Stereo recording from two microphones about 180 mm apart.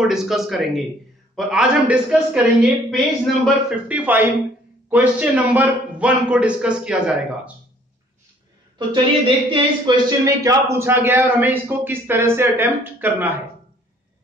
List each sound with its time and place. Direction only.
0.0 s a man's voice: centre (ahead or behind)
9.5 s a man's voice: 25° right (ahead or behind)